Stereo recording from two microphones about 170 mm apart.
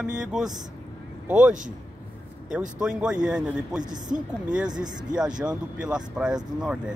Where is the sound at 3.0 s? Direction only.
5° right (ahead or behind).